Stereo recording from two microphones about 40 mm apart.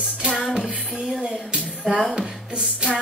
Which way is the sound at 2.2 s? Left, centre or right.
Right.